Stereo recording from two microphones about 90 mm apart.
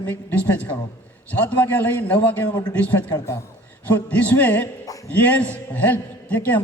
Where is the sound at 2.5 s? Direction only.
50° left (ahead or behind).